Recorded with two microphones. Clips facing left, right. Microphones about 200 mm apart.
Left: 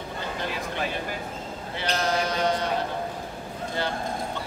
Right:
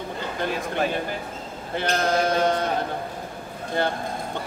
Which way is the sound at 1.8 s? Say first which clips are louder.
Right 4 dB; 50° right (ahead or behind).